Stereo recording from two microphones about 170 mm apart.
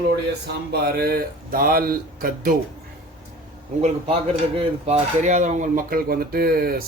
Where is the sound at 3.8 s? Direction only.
40° right (ahead or behind).